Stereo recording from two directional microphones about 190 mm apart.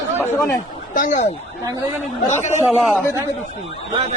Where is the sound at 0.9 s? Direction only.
40° left (ahead or behind).